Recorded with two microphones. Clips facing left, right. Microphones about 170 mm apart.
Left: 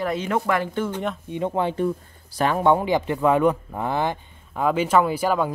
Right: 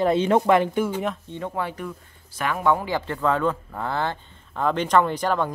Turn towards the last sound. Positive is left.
turn(degrees=10)  # may be behind; listen again after turning